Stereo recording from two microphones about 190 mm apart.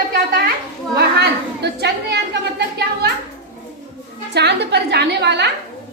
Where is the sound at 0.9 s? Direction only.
60° right (ahead or behind).